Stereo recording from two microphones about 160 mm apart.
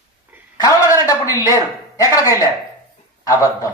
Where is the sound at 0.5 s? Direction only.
20° left (ahead or behind).